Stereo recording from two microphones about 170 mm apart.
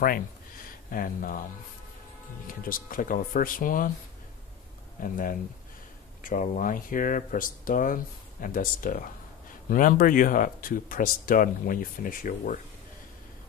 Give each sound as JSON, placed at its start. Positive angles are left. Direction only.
{"t": 0.8, "sound": "speech", "side_deg": 55}
{"t": 2.4, "sound": "speech", "side_deg": 55}
{"t": 5.0, "sound": "speech", "side_deg": 55}